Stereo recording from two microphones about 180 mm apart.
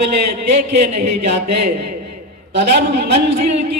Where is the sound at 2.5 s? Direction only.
65° right (ahead or behind).